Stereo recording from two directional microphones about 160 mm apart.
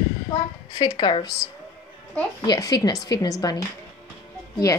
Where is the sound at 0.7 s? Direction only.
30° left (ahead or behind).